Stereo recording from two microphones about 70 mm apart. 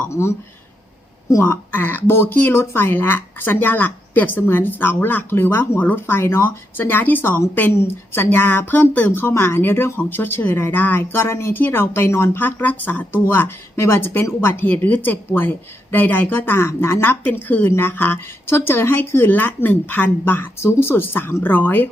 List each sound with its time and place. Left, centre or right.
0.1 s speech: left
1.5 s a woman's voice: left
14.6 s a woman's voice: left